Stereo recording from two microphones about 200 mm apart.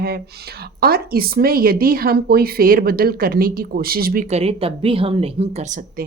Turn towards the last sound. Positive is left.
turn(degrees=-30)  # may be behind; listen again after turning